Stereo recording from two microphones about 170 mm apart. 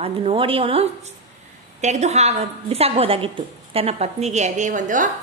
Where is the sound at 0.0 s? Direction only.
35° right (ahead or behind).